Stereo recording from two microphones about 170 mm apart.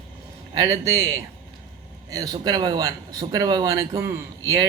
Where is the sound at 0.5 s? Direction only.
20° right (ahead or behind).